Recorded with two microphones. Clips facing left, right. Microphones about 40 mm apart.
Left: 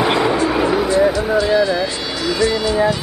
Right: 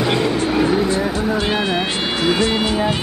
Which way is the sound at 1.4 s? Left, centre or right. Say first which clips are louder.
Left 4 dB; right.